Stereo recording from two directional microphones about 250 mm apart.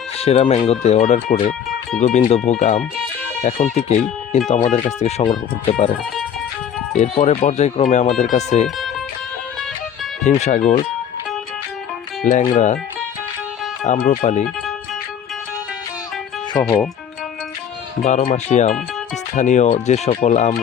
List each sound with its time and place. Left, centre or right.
0.2 s speech: left
6.9 s speech: left
10.2 s speech: left
12.2 s speech: left
13.8 s speech: left
16.6 s speech: centre
18.0 s speech: left